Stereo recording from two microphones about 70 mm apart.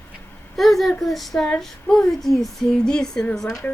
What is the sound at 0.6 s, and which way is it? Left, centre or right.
Speech, centre.